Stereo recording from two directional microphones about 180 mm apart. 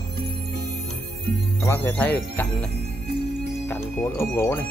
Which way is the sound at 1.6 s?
15° left (ahead or behind).